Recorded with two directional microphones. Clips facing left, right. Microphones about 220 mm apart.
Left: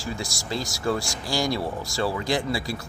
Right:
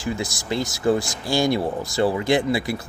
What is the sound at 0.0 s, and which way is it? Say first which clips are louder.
Speech: right 5 dB; 20° right (ahead or behind).